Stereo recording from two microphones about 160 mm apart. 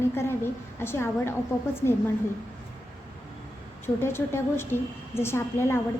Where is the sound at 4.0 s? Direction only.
15° left (ahead or behind).